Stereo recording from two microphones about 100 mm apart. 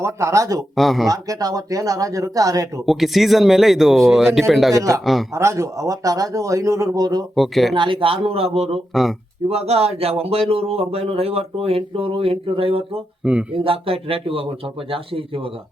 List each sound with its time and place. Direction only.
0.0 s speech: 30° right (ahead or behind)
0.8 s speech: centre (ahead or behind)
1.0 s speech: 35° right (ahead or behind)
2.8 s speech: 5° right (ahead or behind)
4.7 s speech: 35° right (ahead or behind)
7.3 s speech: centre (ahead or behind)
7.8 s speech: 60° right (ahead or behind); by 8.8 s 90° right
8.9 s speech: centre (ahead or behind)
9.5 s speech: 90° right; by 13.0 s 70° right (ahead or behind)
13.2 s speech: 10° right (ahead or behind)
13.7 s speech: 70° right (ahead or behind)